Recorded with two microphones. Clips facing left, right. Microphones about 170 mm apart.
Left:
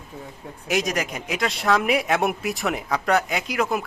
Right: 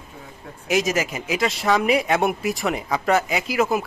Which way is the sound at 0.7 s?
Centre (ahead or behind).